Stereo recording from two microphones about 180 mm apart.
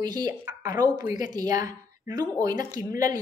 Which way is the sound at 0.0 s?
20° right (ahead or behind).